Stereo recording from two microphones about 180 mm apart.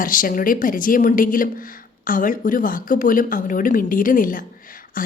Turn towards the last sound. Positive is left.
turn(degrees=50)  # may be behind; listen again after turning